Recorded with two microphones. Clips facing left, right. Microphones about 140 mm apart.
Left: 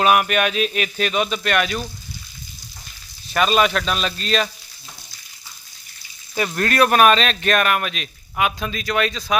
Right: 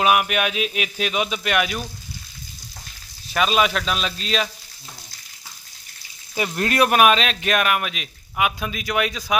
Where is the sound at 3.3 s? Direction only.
Centre (ahead or behind).